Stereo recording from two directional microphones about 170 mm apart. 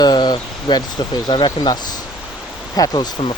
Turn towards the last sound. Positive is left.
turn(degrees=25)  # may be behind; listen again after turning